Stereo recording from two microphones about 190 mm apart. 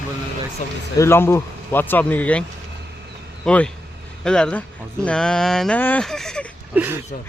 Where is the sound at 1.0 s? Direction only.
15° left (ahead or behind).